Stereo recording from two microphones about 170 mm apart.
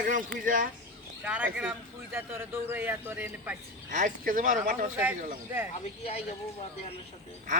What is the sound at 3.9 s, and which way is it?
A man's voice, 50° right (ahead or behind).